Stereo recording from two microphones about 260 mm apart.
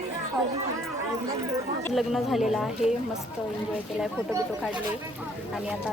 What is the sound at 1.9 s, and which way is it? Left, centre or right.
Speech, centre.